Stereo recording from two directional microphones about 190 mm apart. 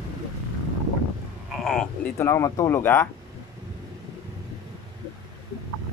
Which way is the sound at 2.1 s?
15° left (ahead or behind).